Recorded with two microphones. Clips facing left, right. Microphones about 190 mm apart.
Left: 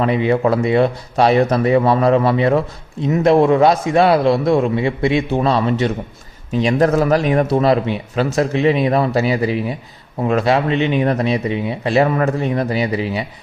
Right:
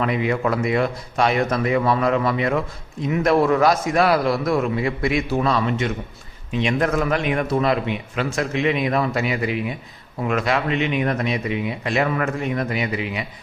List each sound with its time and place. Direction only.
0.0 s speech: 30° left (ahead or behind)